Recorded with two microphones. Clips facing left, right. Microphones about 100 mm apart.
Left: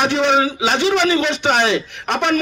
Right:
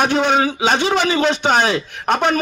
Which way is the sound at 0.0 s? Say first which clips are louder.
Even; 40° right (ahead or behind).